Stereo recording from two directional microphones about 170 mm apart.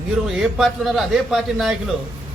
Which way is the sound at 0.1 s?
Centre (ahead or behind).